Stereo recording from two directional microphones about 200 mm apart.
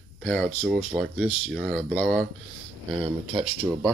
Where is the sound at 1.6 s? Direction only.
5° left (ahead or behind).